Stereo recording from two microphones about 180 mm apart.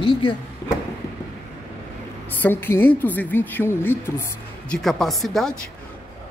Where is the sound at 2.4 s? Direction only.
10° left (ahead or behind).